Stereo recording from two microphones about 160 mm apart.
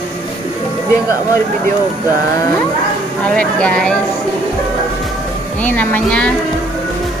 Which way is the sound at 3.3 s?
5° left (ahead or behind).